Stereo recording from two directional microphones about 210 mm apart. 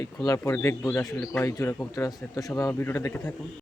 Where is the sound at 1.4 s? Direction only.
15° left (ahead or behind).